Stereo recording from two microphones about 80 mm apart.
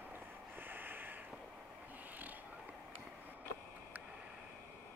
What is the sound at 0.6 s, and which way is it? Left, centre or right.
Snort, right.